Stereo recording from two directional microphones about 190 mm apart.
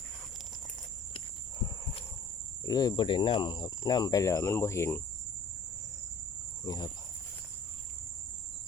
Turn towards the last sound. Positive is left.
turn(degrees=20)  # may be behind; listen again after turning